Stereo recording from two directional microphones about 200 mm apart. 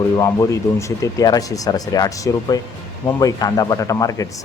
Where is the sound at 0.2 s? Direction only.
15° left (ahead or behind).